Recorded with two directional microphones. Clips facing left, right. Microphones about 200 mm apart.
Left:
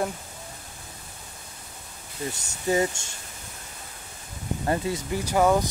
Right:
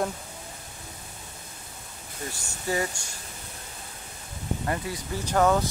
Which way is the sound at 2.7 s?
20° left (ahead or behind).